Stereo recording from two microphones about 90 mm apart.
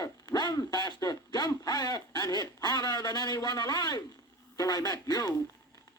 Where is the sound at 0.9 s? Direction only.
45° left (ahead or behind).